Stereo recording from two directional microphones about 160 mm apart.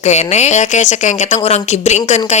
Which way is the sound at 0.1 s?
45° left (ahead or behind).